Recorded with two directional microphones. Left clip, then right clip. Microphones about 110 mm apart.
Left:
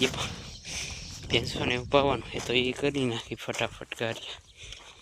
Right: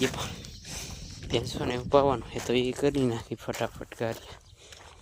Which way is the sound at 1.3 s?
40° right (ahead or behind).